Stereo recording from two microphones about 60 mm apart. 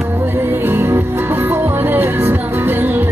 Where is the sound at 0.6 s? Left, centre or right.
Right.